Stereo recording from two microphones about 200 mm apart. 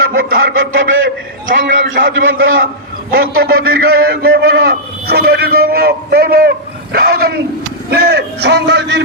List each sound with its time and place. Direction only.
0.0 s a sound: 50° right (ahead or behind)
0.5 s a man's voice: 80° right
1.5 s a man's voice: 65° right (ahead or behind)
2.1 s a man's voice: 80° right
3.3 s a man's voice: 50° right (ahead or behind)